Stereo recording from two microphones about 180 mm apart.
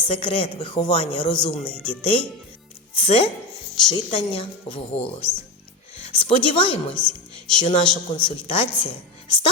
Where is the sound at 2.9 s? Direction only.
30° left (ahead or behind).